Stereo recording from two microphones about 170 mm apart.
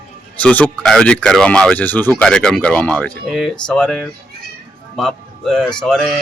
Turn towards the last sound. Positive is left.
turn(degrees=5)  # may be behind; listen again after turning